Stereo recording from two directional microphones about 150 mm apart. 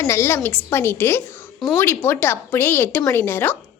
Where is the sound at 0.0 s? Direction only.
20° left (ahead or behind).